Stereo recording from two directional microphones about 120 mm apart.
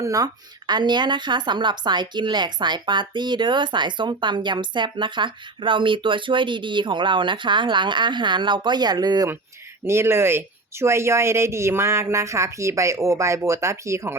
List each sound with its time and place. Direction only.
0.0 s speech: 30° right (ahead or behind)
9.8 s speech: 20° right (ahead or behind)